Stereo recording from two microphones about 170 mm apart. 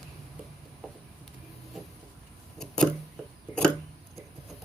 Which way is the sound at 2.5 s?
5° left (ahead or behind).